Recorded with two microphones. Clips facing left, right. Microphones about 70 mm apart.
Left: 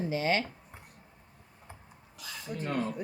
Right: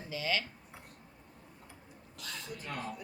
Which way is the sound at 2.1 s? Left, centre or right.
Centre.